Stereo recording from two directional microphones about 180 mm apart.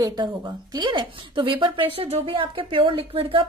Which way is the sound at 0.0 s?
20° right (ahead or behind).